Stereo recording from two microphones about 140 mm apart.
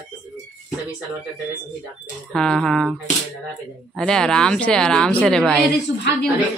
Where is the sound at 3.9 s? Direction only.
5° left (ahead or behind).